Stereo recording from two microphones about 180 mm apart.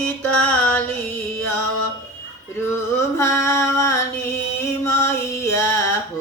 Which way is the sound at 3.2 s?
15° left (ahead or behind).